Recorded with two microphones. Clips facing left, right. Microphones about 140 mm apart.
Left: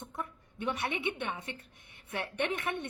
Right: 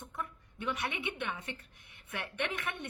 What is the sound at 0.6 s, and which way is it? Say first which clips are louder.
Speech: left 3 dB; 30° left (ahead or behind).